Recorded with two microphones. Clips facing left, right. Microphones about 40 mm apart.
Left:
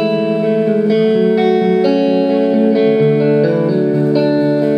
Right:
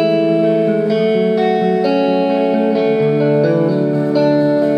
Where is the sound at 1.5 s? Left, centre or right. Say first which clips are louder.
Left 2 dB; centre.